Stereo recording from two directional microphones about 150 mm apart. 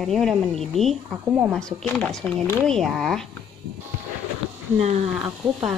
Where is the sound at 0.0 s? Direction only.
Centre (ahead or behind).